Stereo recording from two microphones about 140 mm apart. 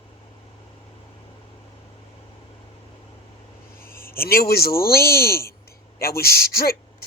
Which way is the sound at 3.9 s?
90° left.